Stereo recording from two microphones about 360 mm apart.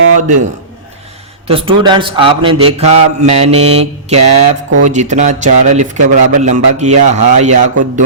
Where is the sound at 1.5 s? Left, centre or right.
Centre.